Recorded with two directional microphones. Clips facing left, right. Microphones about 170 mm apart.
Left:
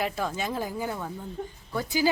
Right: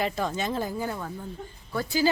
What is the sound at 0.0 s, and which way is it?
Speech, 5° left (ahead or behind).